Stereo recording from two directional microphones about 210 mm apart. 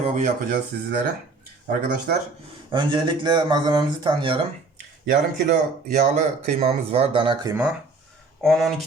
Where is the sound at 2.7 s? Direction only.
20° right (ahead or behind).